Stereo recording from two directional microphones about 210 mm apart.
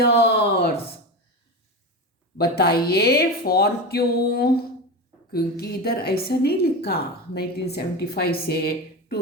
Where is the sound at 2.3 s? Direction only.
50° left (ahead or behind).